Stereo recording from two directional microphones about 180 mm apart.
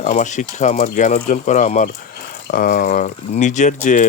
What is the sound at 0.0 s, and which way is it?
Speech, 45° left (ahead or behind).